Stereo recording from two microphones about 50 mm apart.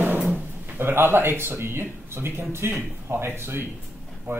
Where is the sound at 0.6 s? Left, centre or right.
Right.